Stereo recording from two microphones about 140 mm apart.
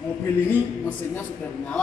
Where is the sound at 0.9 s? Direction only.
10° left (ahead or behind).